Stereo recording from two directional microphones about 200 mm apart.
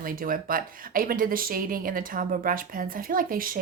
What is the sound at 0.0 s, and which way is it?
Speech, 45° right (ahead or behind).